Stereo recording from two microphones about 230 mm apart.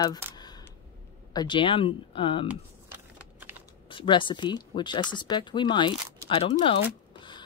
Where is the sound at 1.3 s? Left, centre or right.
Centre.